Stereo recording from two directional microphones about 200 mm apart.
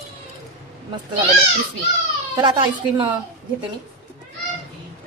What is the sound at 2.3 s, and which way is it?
Speech, 25° right (ahead or behind).